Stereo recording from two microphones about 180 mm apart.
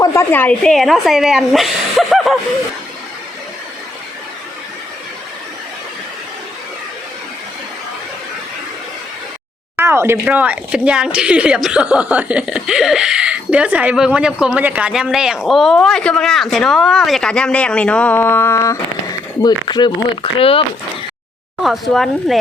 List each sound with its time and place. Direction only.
0.0 s a woman's voice: 15° left (ahead or behind); by 2.4 s centre (ahead or behind)
9.7 s speech: 15° right (ahead or behind); by 20.7 s 30° left (ahead or behind)
21.6 s speech: centre (ahead or behind)